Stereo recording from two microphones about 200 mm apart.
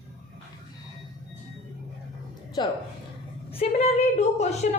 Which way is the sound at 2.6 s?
25° left (ahead or behind).